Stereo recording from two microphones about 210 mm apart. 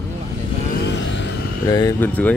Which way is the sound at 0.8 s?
60° left (ahead or behind).